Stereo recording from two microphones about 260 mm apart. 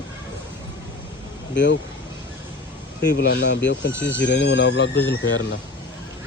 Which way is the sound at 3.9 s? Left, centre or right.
Centre.